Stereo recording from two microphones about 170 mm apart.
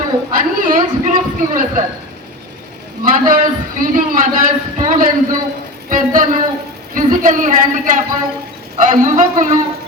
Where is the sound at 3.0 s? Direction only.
55° right (ahead or behind).